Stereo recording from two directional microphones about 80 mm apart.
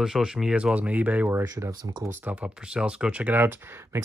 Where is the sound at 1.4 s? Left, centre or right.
Right.